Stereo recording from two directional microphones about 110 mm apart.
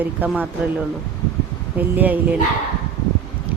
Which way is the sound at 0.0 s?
15° right (ahead or behind).